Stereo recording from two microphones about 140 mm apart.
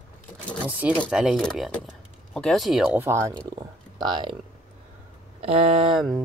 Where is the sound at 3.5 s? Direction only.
30° right (ahead or behind).